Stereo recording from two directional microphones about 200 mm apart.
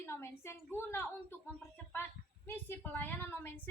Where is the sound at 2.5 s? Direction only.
10° left (ahead or behind).